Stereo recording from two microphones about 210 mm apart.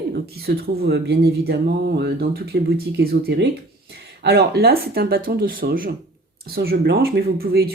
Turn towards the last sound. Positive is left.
turn(degrees=-45)  # may be behind; listen again after turning